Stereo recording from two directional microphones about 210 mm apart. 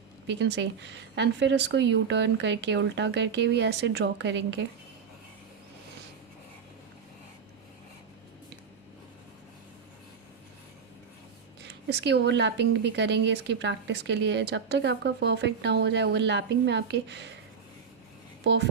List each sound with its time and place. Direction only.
0.3 s a woman's voice: 55° right (ahead or behind)
11.6 s a woman's voice: 55° right (ahead or behind)